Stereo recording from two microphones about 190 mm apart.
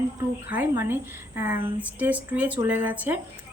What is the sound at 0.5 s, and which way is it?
A woman's voice, 10° right (ahead or behind).